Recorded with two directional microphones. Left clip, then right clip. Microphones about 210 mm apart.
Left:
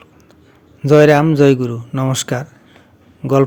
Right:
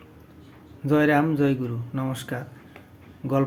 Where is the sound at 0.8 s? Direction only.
50° left (ahead or behind).